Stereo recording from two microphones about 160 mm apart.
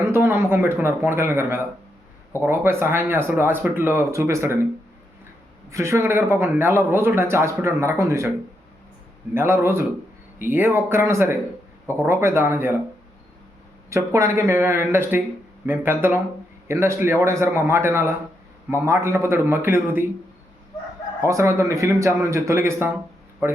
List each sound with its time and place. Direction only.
0.0 s speech: 15° right (ahead or behind)
5.7 s speech: 15° right (ahead or behind)
9.3 s speech: 15° right (ahead or behind)
13.9 s speech: 20° right (ahead or behind)
21.2 s speech: 20° right (ahead or behind)